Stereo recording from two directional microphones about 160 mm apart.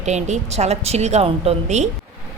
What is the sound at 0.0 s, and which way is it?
Speech, 45° right (ahead or behind).